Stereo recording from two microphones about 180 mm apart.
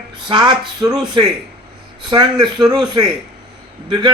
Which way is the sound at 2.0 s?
25° right (ahead or behind).